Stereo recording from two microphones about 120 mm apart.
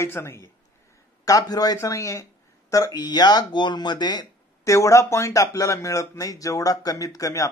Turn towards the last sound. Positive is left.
turn(degrees=25)  # may be behind; listen again after turning